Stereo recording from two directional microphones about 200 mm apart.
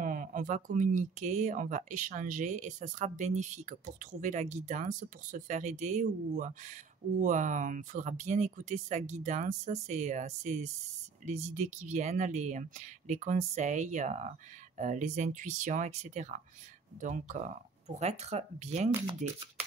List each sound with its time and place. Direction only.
0.0 s speech: 45° right (ahead or behind)